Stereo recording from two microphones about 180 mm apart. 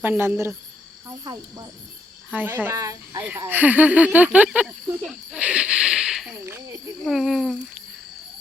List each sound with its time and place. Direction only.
0.0 s speech: 10° right (ahead or behind)
1.0 s cricket: 25° right (ahead or behind)
2.3 s speech: 10° right (ahead or behind)
6.4 s speech: 15° right (ahead or behind)
7.0 s speech: centre (ahead or behind)